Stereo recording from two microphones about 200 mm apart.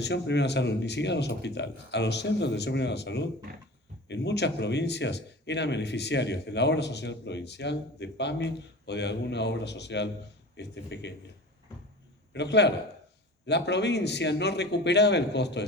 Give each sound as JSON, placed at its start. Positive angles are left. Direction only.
{"t": 0.0, "sound": "speech", "side_deg": 60}
{"t": 12.3, "sound": "speech", "side_deg": 60}